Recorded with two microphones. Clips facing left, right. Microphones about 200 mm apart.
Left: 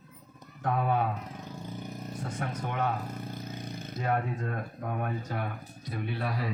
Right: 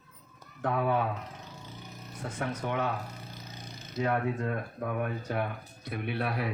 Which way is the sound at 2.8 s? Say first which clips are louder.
Left 2 dB; 55° left (ahead or behind).